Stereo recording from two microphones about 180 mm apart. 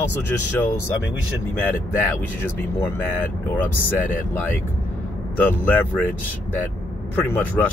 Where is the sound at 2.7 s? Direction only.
10° left (ahead or behind).